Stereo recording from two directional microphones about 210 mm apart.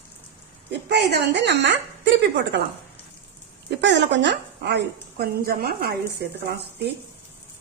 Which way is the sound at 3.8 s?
55° right (ahead or behind).